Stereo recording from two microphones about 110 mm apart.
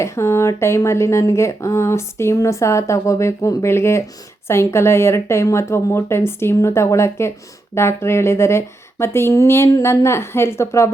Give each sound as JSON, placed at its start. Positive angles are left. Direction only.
{"t": 0.0, "sound": "speech", "side_deg": 25}